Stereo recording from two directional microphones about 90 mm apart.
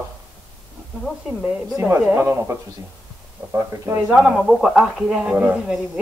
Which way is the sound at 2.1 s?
30° right (ahead or behind).